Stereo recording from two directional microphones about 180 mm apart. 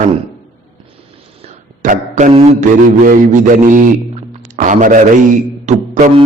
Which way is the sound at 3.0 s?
45° right (ahead or behind).